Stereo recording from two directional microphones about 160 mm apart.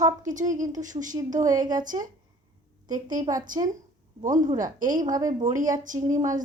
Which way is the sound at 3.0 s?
25° right (ahead or behind).